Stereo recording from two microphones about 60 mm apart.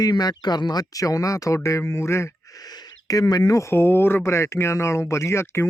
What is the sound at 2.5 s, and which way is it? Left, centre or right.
Speech, left.